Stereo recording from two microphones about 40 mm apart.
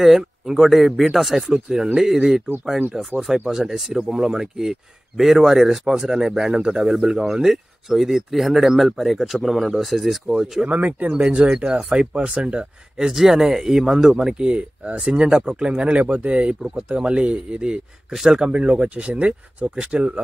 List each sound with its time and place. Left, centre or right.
0.0 s speech: centre
10.3 s speech: centre
10.7 s speech: right
13.0 s speech: centre
14.5 s speech: right
18.1 s speech: centre
18.5 s speech: right